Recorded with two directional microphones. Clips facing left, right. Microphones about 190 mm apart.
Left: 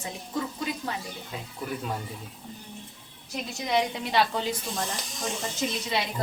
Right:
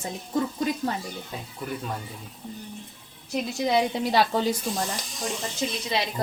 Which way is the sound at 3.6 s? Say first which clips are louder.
Right 3 dB; 30° right (ahead or behind).